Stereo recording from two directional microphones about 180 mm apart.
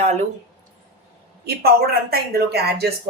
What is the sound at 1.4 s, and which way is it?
Speech, 60° right (ahead or behind).